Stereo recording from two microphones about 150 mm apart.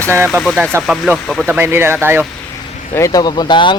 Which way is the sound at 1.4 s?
15° right (ahead or behind).